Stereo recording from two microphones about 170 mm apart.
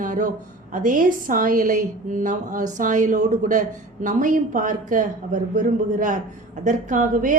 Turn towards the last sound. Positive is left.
turn(degrees=-50)  # may be behind; listen again after turning